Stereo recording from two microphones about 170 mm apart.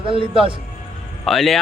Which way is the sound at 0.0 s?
30° right (ahead or behind).